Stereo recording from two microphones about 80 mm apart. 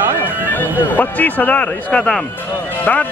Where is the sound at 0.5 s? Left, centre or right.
Left.